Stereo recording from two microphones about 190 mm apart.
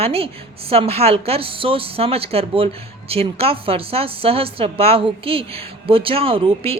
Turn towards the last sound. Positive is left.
turn(degrees=-30)  # may be behind; listen again after turning